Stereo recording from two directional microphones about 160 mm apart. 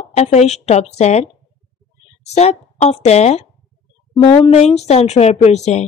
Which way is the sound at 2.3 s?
45° left (ahead or behind).